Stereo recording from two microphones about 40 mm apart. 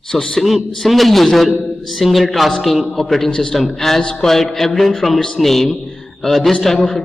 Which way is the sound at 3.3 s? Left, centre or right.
Left.